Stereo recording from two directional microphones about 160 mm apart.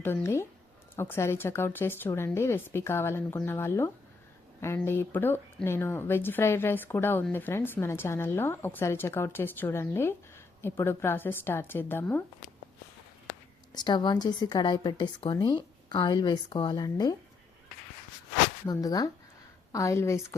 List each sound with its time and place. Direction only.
0.0 s speech: 15° left (ahead or behind)
13.7 s speech: 30° left (ahead or behind)
18.6 s speech: 25° left (ahead or behind)